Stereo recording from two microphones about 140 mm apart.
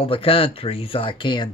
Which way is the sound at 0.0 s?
40° left (ahead or behind).